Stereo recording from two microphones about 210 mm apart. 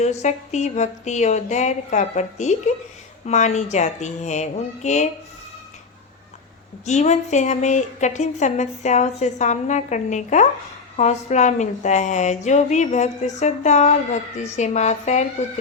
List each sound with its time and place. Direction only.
0.0 s a woman's voice: 35° left (ahead or behind)
6.8 s a woman's voice: 35° left (ahead or behind)